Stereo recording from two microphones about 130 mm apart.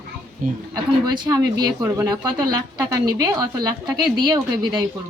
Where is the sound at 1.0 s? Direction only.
30° right (ahead or behind).